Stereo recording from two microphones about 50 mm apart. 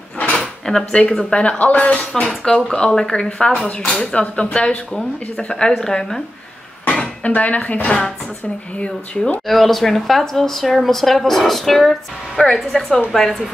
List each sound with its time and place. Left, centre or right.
0.2 s drawer open or close: left
1.0 s a woman's voice: left
6.9 s speech: left
9.5 s a woman's voice: centre